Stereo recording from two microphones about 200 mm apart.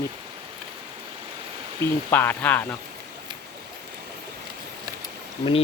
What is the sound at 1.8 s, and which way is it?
Speech, 10° left (ahead or behind).